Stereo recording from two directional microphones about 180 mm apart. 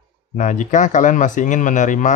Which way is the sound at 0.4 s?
45° left (ahead or behind).